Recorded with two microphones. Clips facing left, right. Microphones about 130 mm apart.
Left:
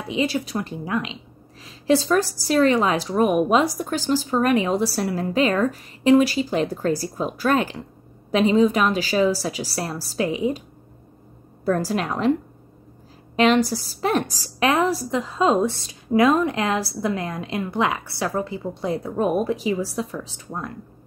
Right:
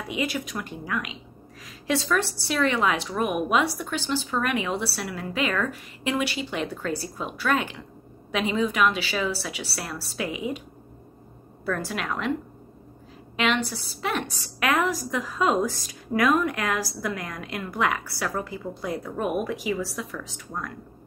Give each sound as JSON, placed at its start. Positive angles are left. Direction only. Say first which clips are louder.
{"t": 0.1, "sound": "a woman's voice", "louder": "left 6 dB", "side_deg": 30}
{"t": 11.6, "sound": "a woman's voice", "louder": "left 7 dB", "side_deg": 35}
{"t": 13.4, "sound": "a woman's voice", "louder": "left 8 dB", "side_deg": 40}